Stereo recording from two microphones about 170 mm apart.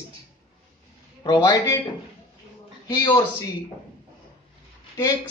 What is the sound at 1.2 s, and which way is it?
Speech, 20° left (ahead or behind).